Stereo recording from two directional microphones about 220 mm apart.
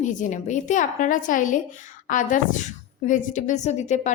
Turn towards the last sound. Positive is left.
turn(degrees=30)  # may be behind; listen again after turning